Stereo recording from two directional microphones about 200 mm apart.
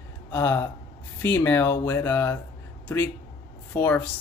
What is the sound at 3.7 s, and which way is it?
Speech, 10° left (ahead or behind).